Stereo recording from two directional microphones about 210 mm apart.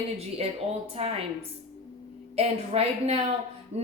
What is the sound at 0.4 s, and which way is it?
A woman's voice, 30° right (ahead or behind).